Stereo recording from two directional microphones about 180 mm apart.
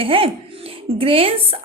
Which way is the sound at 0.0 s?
30° right (ahead or behind).